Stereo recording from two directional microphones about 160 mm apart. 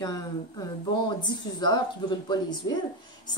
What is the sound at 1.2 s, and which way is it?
Speech, 25° left (ahead or behind).